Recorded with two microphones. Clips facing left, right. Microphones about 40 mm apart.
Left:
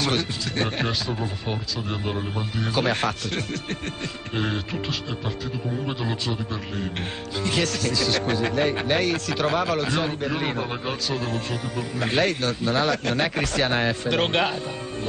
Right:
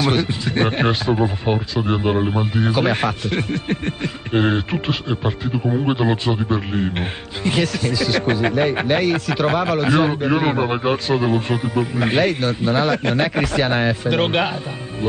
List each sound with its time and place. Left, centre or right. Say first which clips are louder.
0.0 s speech: right 6 dB; centre
0.6 s speech: right 7 dB; right
7.9 s a man's voice: right 4 dB; centre
10.6 s a man's voice: right 9 dB; right; by 14.5 s centre